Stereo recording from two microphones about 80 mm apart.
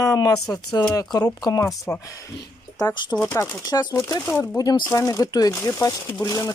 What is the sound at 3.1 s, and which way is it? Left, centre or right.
Speech, left.